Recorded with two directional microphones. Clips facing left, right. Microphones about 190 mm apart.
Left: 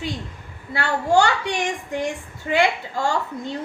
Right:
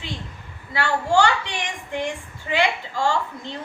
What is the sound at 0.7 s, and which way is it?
A woman's voice, 45° left (ahead or behind).